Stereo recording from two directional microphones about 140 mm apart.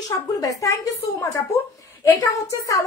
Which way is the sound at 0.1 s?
25° left (ahead or behind).